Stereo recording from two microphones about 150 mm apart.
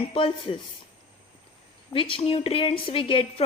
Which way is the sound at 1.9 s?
35° left (ahead or behind).